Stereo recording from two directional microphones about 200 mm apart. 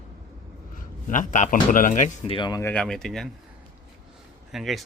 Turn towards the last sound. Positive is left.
turn(degrees=0)  # may be behind; listen again after turning